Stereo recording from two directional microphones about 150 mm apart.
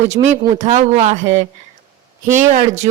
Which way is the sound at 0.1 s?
50° right (ahead or behind).